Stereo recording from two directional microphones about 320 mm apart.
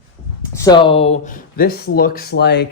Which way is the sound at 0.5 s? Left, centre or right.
Centre.